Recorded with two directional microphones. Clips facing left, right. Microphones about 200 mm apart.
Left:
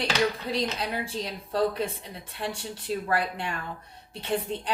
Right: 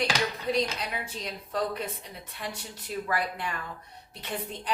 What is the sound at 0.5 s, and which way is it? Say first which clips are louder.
A woman's voice: even; 30° left (ahead or behind).